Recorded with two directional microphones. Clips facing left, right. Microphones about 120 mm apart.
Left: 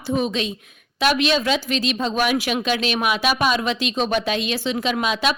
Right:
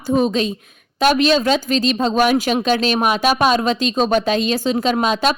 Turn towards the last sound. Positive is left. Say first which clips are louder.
# right 4 dB
turn(degrees=-40)  # may be behind; listen again after turning